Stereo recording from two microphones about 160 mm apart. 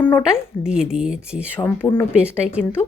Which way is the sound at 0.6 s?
5° right (ahead or behind).